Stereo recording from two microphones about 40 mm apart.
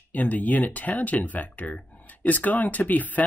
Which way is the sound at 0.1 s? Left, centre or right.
Left.